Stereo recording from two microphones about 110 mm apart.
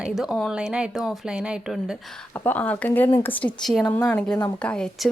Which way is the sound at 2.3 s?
15° left (ahead or behind).